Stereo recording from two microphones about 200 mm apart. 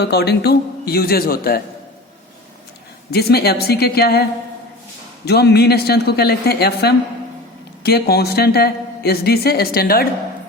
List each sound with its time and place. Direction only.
0.0 s a woman's voice: 55° left (ahead or behind)
3.1 s a woman's voice: 55° left (ahead or behind)